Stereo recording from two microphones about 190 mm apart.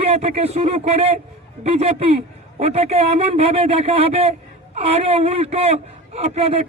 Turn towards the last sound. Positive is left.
turn(degrees=-35)  # may be behind; listen again after turning